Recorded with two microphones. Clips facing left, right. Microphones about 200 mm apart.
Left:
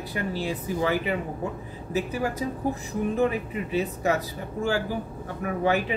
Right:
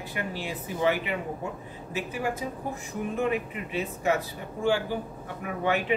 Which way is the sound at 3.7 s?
40° left (ahead or behind).